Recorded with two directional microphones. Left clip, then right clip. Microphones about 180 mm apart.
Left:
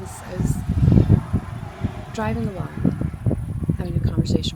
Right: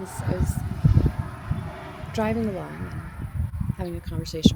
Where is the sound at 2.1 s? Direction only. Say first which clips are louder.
Right 1 dB; 15° right (ahead or behind).